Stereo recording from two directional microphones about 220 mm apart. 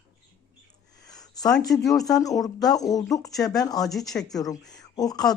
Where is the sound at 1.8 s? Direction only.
15° left (ahead or behind).